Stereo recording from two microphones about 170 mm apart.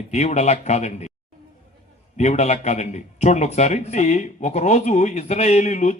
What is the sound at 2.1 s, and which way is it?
A man's voice, 40° left (ahead or behind).